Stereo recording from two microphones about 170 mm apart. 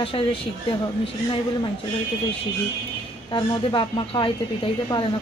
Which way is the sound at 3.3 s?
25° left (ahead or behind).